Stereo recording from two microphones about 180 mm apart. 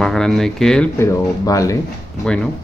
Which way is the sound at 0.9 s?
15° left (ahead or behind).